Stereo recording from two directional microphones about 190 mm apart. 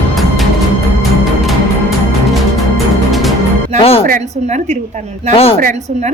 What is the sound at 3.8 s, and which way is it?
Speech, 30° left (ahead or behind).